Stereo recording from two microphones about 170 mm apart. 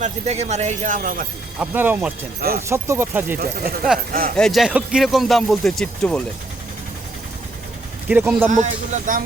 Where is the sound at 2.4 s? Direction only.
65° right (ahead or behind).